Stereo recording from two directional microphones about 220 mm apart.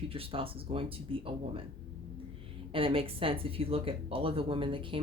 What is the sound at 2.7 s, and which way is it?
Speech, 25° right (ahead or behind).